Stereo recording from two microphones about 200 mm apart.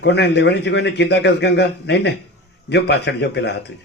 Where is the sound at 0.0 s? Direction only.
55° left (ahead or behind).